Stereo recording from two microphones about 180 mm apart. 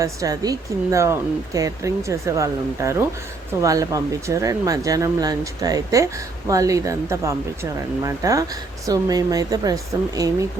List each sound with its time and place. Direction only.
0.0 s speech: 20° right (ahead or behind)